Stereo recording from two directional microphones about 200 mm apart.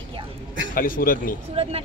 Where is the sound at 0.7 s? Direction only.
45° left (ahead or behind).